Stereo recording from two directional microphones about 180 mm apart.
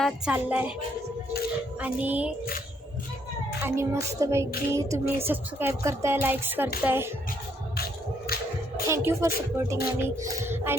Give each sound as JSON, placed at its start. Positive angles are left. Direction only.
{"t": 0.0, "sound": "speech", "side_deg": -10}
{"t": 1.8, "sound": "speech", "side_deg": -10}
{"t": 3.6, "sound": "speech", "side_deg": -15}
{"t": 8.3, "sound": "music", "side_deg": 60}
{"t": 8.9, "sound": "speech", "side_deg": -15}